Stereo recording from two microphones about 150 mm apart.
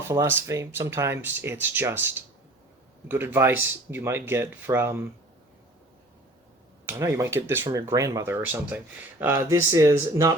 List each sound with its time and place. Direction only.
0.1 s speech: 20° right (ahead or behind)
6.8 s speech: 20° right (ahead or behind)